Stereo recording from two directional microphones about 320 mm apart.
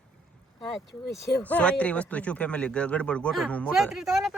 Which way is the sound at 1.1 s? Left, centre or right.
Centre.